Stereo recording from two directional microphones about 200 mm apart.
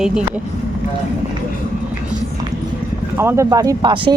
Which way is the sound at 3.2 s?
15° right (ahead or behind).